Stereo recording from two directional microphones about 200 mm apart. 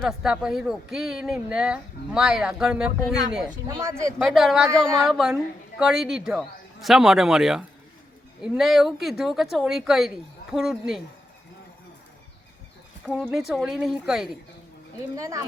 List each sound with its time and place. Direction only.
0.0 s speech: 5° right (ahead or behind)
3.7 s speech: 15° right (ahead or behind)
4.3 s speech: centre (ahead or behind)
13.1 s speech: 5° right (ahead or behind)
15.1 s speech: 15° right (ahead or behind)